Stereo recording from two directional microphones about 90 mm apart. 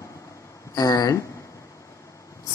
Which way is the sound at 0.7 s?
45° left (ahead or behind).